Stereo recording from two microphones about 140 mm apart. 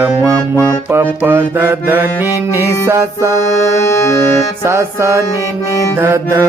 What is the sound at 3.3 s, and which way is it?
Music, 20° left (ahead or behind).